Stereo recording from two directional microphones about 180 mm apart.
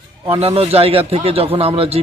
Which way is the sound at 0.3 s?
35° right (ahead or behind).